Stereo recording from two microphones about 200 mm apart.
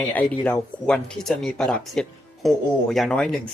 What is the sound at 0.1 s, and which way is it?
Speech, 10° left (ahead or behind).